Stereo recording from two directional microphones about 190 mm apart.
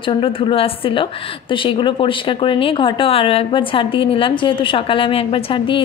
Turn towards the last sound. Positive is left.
turn(degrees=25)  # may be behind; listen again after turning